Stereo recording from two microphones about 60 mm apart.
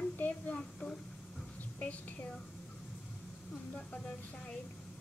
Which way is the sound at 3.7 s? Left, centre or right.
Centre.